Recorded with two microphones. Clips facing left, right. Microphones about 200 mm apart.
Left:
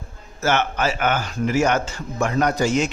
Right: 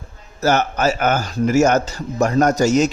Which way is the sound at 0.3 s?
40° right (ahead or behind).